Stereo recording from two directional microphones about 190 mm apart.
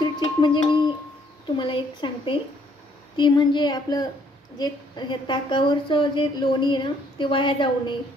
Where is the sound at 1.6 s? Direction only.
25° left (ahead or behind).